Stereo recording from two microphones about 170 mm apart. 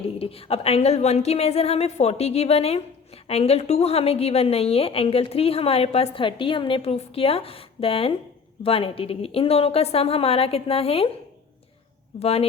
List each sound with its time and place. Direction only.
0.0 s a woman's voice: 35° left (ahead or behind)
12.2 s a woman's voice: 35° left (ahead or behind)